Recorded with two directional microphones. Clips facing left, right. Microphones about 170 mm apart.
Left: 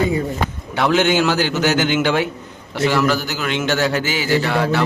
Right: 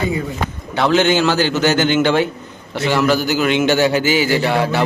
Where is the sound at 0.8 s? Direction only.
5° left (ahead or behind).